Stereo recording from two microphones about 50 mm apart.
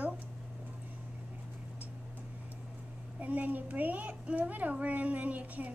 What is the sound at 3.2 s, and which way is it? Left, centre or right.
Speech, right.